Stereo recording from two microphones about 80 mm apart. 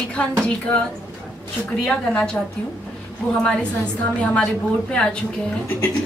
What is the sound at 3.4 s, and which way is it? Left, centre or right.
A woman's voice, centre.